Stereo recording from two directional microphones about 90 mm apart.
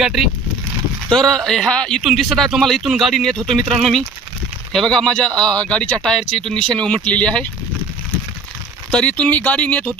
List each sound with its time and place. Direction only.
0.0 s speech: centre (ahead or behind)
2.0 s speech: centre (ahead or behind)
8.9 s speech: 15° left (ahead or behind)